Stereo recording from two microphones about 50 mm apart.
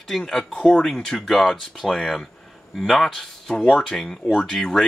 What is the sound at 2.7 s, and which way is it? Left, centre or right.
Speech, centre.